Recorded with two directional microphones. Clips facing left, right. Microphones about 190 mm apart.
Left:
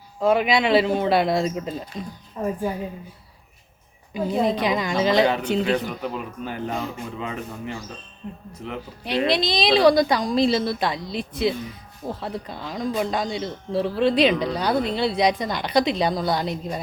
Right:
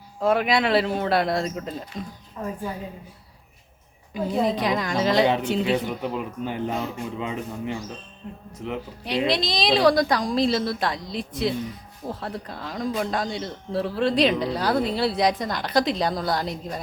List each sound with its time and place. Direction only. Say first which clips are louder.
0.2 s a woman's voice: left 2 dB; centre (ahead or behind)
4.1 s a woman's voice: left 1 dB; centre (ahead or behind)
5.8 s a man's voice: right 1 dB; 20° right (ahead or behind)
9.0 s a woman's voice: left 2 dB; centre (ahead or behind)